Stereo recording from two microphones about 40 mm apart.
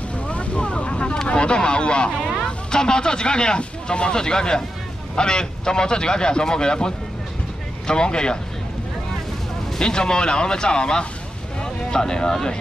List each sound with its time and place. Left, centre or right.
0.3 s vehicle: left
2.4 s speech: centre
9.8 s speech: centre